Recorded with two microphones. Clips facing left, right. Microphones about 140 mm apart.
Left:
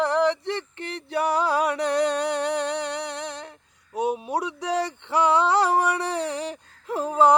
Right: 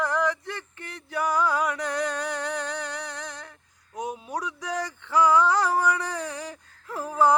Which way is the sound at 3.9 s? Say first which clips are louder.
Left 7 dB; 30° left (ahead or behind).